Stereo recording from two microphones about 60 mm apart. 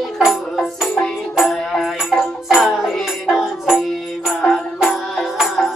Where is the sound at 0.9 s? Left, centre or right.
Centre.